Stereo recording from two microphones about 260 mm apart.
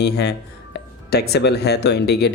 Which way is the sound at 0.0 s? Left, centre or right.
Left.